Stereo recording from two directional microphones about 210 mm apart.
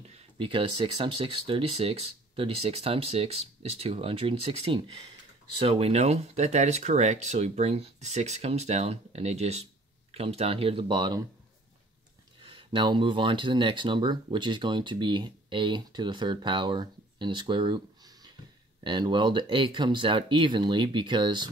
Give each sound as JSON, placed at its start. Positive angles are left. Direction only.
{"t": 0.1, "sound": "speech", "side_deg": -25}
{"t": 12.4, "sound": "speech", "side_deg": -25}